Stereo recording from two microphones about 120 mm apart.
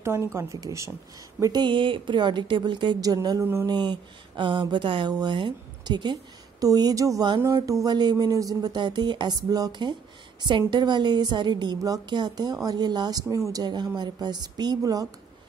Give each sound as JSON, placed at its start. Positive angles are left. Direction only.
{"t": 0.0, "sound": "speech", "side_deg": -20}
{"t": 3.6, "sound": "speech", "side_deg": -40}